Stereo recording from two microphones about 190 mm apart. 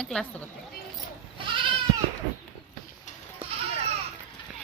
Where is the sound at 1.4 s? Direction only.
25° right (ahead or behind).